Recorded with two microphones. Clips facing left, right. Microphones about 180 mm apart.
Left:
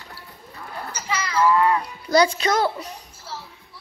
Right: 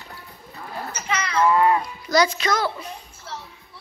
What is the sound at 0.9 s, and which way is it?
Speech, 25° right (ahead or behind).